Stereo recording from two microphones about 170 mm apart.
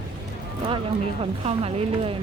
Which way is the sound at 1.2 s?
35° right (ahead or behind).